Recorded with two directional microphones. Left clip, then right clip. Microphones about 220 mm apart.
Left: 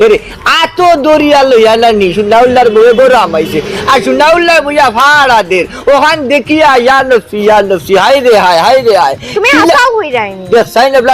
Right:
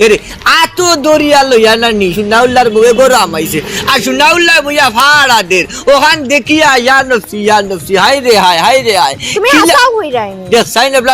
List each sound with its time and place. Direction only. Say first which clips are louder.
0.0 s a man's voice: left 1 dB; 50° right (ahead or behind)
9.4 s speech: left 1 dB; 20° right (ahead or behind)
10.5 s a man's voice: left 2 dB; 50° right (ahead or behind)